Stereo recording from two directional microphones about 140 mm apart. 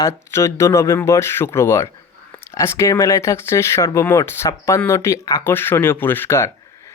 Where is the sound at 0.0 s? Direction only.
20° left (ahead or behind).